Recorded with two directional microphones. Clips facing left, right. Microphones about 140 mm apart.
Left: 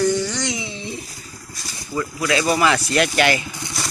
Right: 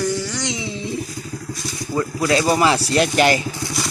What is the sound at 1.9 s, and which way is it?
Speech, 30° right (ahead or behind).